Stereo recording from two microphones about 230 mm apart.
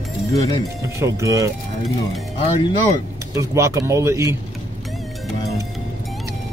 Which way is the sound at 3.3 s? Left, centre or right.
Centre.